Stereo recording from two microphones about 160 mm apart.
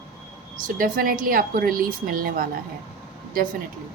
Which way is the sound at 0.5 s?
60° right (ahead or behind).